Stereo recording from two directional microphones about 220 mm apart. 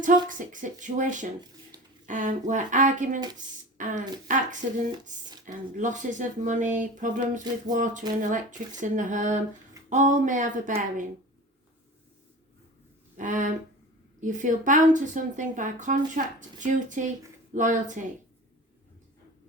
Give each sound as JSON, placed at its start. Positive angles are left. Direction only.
{"t": 0.0, "sound": "a woman's voice", "side_deg": -35}
{"t": 13.1, "sound": "a woman's voice", "side_deg": -35}